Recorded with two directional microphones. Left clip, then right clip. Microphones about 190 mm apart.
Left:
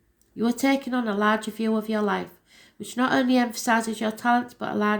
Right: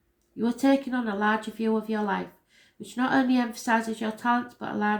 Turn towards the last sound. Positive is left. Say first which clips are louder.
# left 3 dB
turn(degrees=45)  # may be behind; listen again after turning